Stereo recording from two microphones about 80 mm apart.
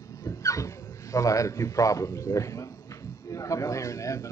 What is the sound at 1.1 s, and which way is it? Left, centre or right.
A man's voice, left.